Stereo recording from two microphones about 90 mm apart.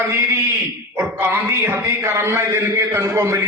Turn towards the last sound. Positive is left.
turn(degrees=-35)  # may be behind; listen again after turning